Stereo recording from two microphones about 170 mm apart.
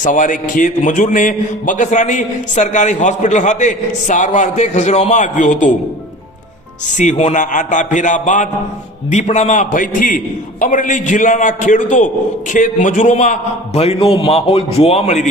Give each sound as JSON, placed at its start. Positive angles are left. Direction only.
{"t": 0.0, "sound": "a man's voice", "side_deg": 50}
{"t": 6.9, "sound": "a man's voice", "side_deg": 45}
{"t": 13.7, "sound": "a man's voice", "side_deg": 35}